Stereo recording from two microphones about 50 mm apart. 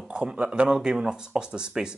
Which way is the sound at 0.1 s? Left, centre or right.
Centre.